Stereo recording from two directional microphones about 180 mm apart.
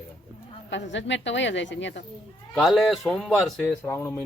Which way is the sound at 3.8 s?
15° left (ahead or behind).